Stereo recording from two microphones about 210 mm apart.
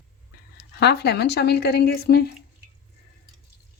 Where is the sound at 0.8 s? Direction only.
50° left (ahead or behind).